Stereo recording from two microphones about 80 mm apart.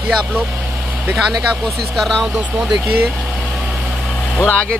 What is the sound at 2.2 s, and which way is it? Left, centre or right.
Speech, centre.